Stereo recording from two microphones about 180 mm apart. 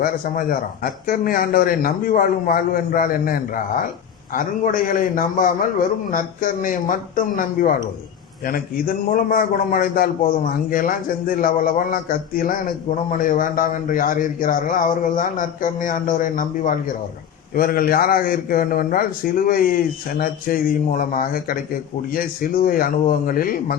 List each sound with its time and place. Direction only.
0.0 s a man's voice: 50° left (ahead or behind)